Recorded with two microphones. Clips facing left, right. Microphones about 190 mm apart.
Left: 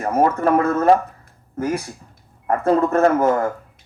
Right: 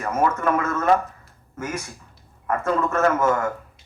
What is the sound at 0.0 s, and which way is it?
Speech, 35° left (ahead or behind).